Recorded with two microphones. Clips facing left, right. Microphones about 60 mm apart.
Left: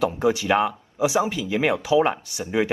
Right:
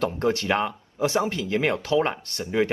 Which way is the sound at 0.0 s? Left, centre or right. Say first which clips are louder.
Left 3 dB; centre.